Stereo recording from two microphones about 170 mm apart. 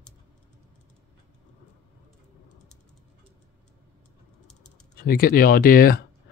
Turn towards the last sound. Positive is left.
turn(degrees=60)  # may be behind; listen again after turning